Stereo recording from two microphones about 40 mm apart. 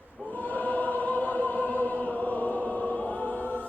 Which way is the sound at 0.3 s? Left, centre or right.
Left.